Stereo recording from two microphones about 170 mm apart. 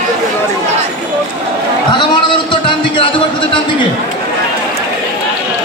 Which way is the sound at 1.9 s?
25° left (ahead or behind).